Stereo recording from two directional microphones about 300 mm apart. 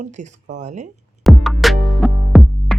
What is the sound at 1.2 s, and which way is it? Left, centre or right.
Music, centre.